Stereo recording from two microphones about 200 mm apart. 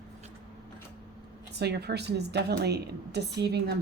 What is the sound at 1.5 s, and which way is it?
A woman's voice, 55° right (ahead or behind).